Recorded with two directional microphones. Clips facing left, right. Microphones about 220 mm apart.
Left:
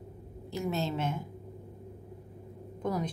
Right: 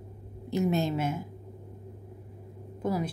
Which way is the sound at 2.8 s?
10° right (ahead or behind).